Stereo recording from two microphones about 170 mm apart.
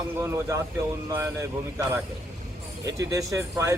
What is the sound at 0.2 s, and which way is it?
Speech, 15° right (ahead or behind).